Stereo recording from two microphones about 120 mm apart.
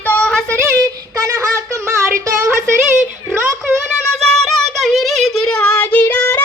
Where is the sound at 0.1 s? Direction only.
10° left (ahead or behind).